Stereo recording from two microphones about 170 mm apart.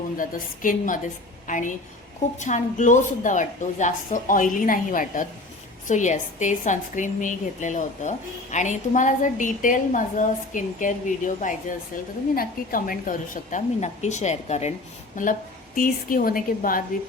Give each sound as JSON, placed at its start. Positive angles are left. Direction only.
{"t": 0.2, "sound": "a woman's voice", "side_deg": 55}